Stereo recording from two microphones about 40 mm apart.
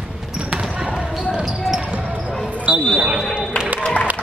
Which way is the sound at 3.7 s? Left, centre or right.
Left.